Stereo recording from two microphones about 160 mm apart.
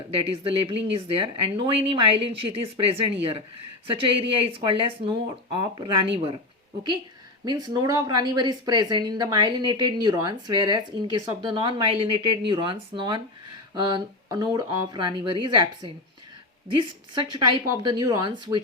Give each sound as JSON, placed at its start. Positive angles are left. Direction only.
{"t": 0.1, "sound": "speech", "side_deg": -35}
{"t": 7.4, "sound": "speech", "side_deg": -25}